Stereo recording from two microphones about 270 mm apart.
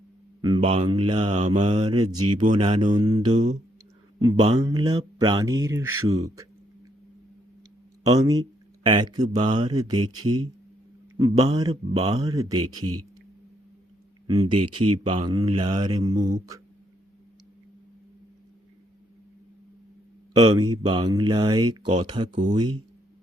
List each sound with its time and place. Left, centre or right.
0.4 s mantra: centre
2.5 s speech: centre
3.3 s mantra: right
4.2 s speech: centre
8.2 s speech: centre
11.2 s speech: centre
14.3 s speech: centre
20.3 s speech: centre